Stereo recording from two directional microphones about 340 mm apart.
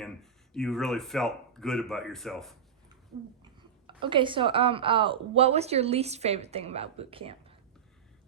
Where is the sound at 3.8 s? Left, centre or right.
Centre.